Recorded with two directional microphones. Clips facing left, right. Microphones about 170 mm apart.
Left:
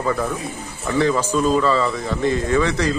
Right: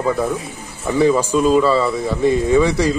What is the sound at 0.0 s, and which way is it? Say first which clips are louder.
Speech: right 3 dB; 10° right (ahead or behind).